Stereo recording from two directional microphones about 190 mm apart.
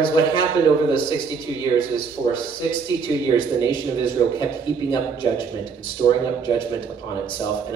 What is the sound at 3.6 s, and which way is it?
Speech, 25° left (ahead or behind).